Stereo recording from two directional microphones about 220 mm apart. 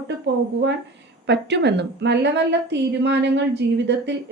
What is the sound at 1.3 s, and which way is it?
A woman's voice, 50° right (ahead or behind).